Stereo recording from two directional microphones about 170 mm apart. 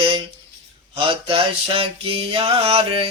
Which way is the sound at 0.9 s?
30° right (ahead or behind).